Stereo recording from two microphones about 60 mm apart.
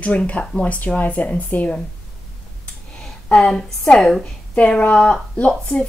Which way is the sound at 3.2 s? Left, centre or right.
Centre.